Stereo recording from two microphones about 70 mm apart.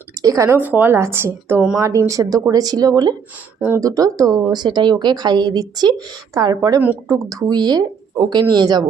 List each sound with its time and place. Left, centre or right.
0.2 s speech: right
0.5 s speech: right
2.0 s speech: right
3.8 s a woman's voice: right
7.1 s speech: right
7.5 s speech: right